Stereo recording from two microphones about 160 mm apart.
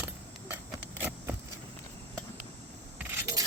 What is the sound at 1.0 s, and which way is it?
Vehicle, 10° right (ahead or behind).